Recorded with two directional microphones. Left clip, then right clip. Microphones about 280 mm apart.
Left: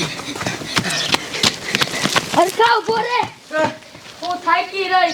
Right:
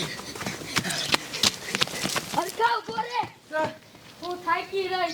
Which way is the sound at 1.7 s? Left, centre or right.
Centre.